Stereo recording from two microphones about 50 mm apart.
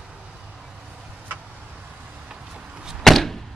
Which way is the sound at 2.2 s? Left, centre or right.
Centre.